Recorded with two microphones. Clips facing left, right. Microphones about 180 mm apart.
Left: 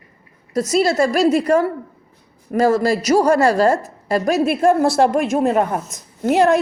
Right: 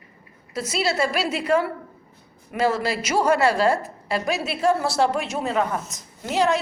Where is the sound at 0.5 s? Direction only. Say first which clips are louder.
Left 8 dB; 40° left (ahead or behind).